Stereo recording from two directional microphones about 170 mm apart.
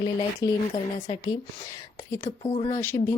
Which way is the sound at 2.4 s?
30° left (ahead or behind).